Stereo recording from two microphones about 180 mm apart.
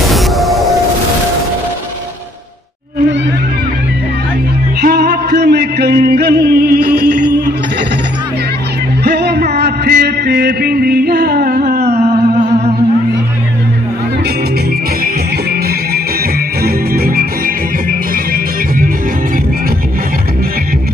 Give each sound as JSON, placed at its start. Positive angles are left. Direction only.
{"t": 0.1, "sound": "music", "side_deg": 0}
{"t": 4.8, "sound": "music", "side_deg": -65}
{"t": 9.0, "sound": "a sound", "side_deg": -65}
{"t": 16.6, "sound": "music", "side_deg": -55}